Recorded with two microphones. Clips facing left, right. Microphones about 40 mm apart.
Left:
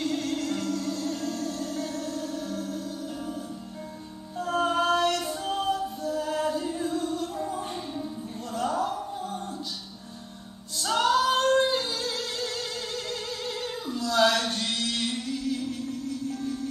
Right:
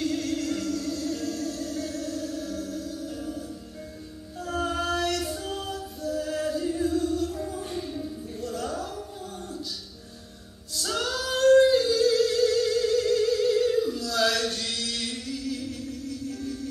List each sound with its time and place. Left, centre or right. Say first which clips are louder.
0.0 s music: right 1 dB; centre
4.4 s music: left 4 dB; centre
10.8 s singing: left 6 dB; centre